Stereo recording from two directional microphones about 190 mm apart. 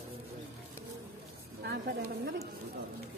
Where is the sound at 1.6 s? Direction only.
60° right (ahead or behind).